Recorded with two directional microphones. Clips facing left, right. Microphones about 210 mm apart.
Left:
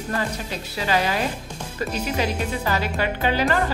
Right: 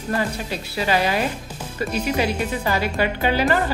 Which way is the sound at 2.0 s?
10° right (ahead or behind).